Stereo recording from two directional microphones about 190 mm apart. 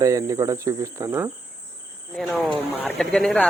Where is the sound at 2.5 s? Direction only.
Centre (ahead or behind).